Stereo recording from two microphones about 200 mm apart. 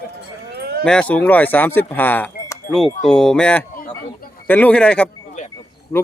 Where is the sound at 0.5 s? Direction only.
50° right (ahead or behind).